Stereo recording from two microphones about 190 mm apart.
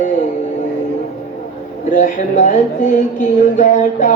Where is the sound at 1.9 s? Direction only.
40° left (ahead or behind).